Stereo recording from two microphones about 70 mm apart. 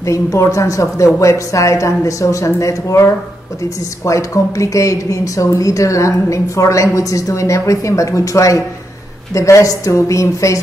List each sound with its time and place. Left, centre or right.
0.0 s a woman's voice: left